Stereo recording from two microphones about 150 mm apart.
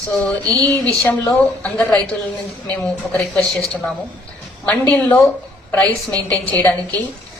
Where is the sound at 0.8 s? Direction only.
10° left (ahead or behind).